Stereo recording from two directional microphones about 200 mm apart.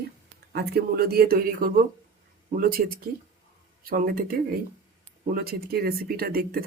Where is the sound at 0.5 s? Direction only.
55° right (ahead or behind).